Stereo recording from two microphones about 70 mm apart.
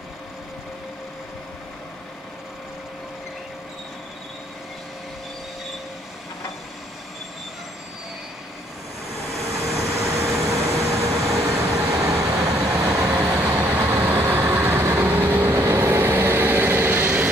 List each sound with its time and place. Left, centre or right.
9.5 s vehicle: right
13.2 s vehicle: right